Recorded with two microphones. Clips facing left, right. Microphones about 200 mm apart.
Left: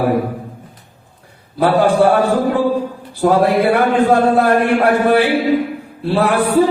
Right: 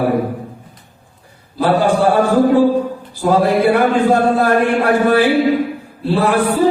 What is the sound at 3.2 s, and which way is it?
Music, 55° left (ahead or behind).